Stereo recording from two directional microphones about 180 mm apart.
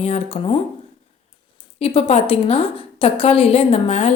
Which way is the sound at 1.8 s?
35° left (ahead or behind).